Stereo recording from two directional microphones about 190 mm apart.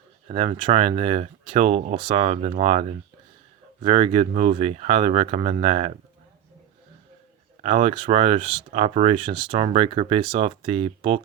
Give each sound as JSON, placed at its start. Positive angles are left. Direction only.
{"t": 0.3, "sound": "speech", "side_deg": -30}
{"t": 7.6, "sound": "speech", "side_deg": -35}